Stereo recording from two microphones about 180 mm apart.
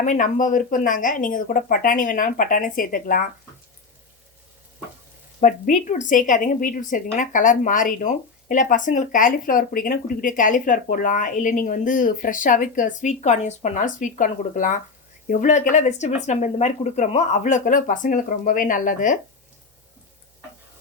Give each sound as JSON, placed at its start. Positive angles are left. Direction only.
{"t": 0.0, "sound": "a woman's voice", "side_deg": 45}
{"t": 5.4, "sound": "a woman's voice", "side_deg": 45}